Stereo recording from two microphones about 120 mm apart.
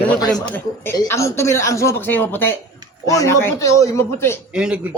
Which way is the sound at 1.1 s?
25° left (ahead or behind).